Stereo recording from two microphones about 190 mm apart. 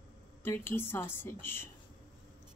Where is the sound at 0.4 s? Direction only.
10° left (ahead or behind).